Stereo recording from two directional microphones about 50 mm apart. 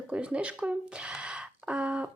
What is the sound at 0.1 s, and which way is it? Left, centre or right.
Speech, right.